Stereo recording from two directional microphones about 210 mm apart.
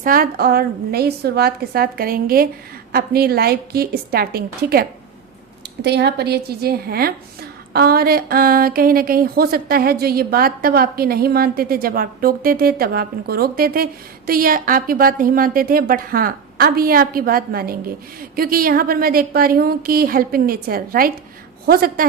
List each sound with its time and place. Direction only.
0.0 s speech: 40° right (ahead or behind)